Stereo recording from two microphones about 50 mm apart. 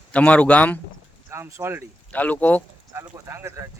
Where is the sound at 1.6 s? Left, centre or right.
Right.